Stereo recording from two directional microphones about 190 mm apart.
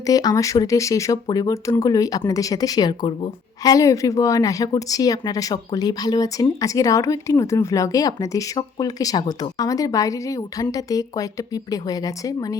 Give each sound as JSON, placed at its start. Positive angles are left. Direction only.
{"t": 0.0, "sound": "speech", "side_deg": 20}